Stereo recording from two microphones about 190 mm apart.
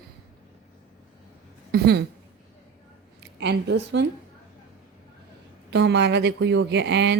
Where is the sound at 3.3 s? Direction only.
65° right (ahead or behind).